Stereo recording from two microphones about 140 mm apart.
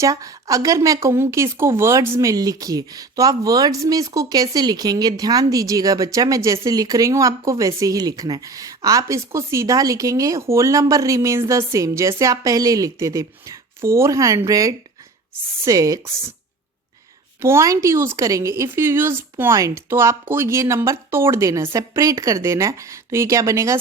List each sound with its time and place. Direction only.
0.0 s speech: 25° right (ahead or behind)
17.4 s speech: 20° right (ahead or behind)